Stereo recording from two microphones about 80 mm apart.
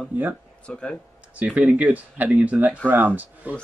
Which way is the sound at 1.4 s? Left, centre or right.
Centre.